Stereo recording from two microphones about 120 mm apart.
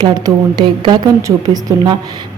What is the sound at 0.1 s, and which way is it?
Speech, 35° right (ahead or behind).